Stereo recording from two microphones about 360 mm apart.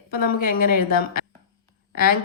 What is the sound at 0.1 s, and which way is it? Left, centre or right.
Speech, left.